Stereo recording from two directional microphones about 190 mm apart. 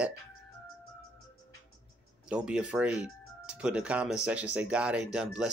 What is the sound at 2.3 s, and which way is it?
Speech, 5° right (ahead or behind).